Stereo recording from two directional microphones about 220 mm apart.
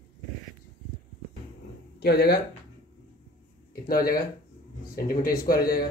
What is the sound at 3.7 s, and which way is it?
Speech, 40° left (ahead or behind).